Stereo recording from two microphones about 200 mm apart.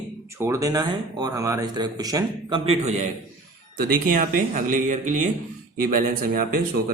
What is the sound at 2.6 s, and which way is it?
A man's voice, 35° right (ahead or behind).